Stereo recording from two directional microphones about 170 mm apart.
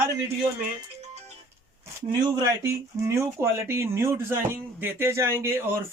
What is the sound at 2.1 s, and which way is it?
A man's voice, 20° right (ahead or behind).